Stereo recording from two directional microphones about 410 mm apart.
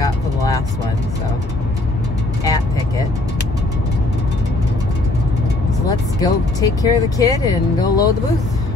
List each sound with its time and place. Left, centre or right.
5.9 s speech: centre